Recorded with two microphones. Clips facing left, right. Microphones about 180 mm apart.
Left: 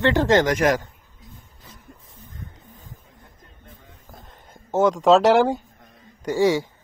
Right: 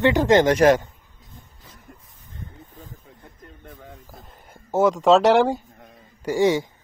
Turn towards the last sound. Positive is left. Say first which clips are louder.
# even
turn(degrees=-20)  # may be behind; listen again after turning